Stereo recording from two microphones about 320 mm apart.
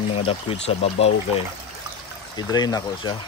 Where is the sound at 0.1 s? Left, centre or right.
Centre.